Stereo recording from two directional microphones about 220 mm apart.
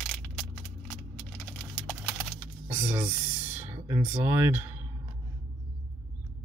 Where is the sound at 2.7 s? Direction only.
10° right (ahead or behind).